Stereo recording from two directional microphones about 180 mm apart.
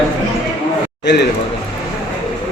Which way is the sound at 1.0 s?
70° left (ahead or behind).